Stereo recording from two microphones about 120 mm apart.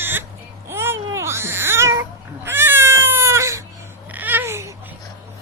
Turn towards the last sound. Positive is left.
turn(degrees=-20)  # may be behind; listen again after turning